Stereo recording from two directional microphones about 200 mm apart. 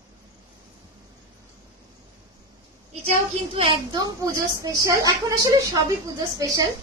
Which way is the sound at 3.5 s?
25° right (ahead or behind).